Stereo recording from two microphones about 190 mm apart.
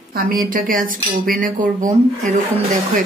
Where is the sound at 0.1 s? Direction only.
50° right (ahead or behind).